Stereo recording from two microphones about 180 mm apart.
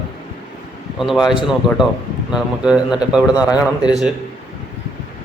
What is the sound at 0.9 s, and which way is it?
Speech, centre (ahead or behind).